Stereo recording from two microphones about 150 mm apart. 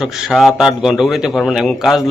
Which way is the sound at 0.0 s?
Centre (ahead or behind).